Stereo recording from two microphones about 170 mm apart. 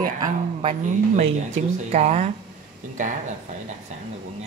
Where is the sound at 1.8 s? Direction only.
40° right (ahead or behind).